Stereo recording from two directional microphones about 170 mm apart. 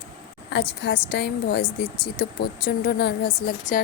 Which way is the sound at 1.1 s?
70° left (ahead or behind).